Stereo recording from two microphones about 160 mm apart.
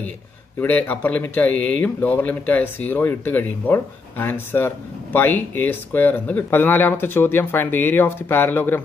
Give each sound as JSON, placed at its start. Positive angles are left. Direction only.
{"t": 0.6, "sound": "speech", "side_deg": 10}